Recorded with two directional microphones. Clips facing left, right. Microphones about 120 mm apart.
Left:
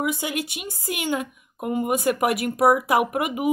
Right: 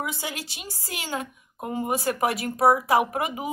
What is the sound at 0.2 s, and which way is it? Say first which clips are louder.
Speech: left 6 dB; 30° right (ahead or behind).